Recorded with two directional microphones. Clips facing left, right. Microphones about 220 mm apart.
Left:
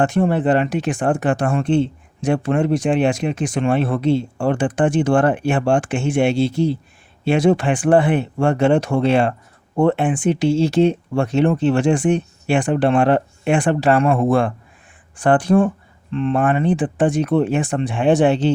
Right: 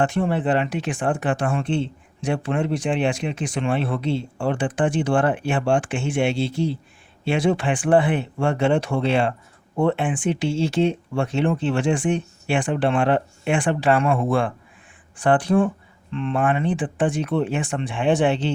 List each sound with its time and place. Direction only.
0.0 s speech: 45° left (ahead or behind)